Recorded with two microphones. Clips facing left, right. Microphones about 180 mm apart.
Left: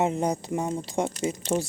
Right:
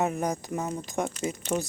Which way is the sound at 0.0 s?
25° left (ahead or behind).